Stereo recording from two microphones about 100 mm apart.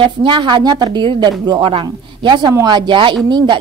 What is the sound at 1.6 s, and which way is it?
Speech, 60° right (ahead or behind).